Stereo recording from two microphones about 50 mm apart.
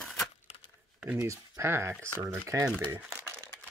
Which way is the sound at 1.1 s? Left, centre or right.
Right.